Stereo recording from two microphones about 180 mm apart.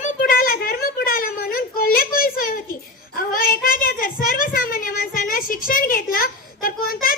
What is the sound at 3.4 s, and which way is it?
Child singing, 50° left (ahead or behind).